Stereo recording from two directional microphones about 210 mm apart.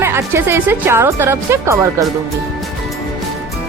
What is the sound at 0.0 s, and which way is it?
Speech, 10° right (ahead or behind).